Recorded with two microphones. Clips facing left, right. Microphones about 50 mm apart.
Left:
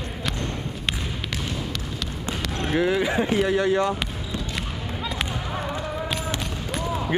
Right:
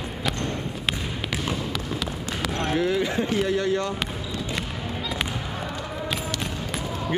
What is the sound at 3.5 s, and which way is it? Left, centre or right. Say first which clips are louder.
Speech: left 3 dB; centre.